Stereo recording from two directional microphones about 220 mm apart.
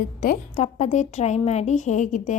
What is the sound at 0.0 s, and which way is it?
A woman's voice, 35° left (ahead or behind).